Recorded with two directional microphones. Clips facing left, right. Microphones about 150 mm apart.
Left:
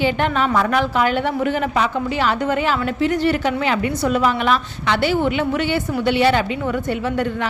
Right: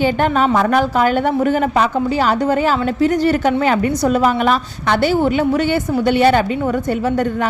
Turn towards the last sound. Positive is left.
turn(degrees=-40)  # may be behind; listen again after turning